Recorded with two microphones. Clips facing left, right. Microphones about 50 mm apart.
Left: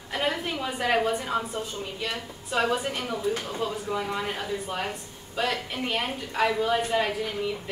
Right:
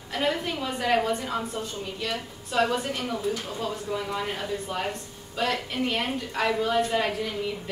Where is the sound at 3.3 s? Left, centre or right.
Left.